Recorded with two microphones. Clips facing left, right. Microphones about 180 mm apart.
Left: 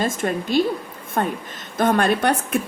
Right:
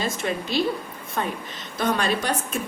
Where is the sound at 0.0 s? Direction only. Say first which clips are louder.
Left 4 dB; 50° left (ahead or behind).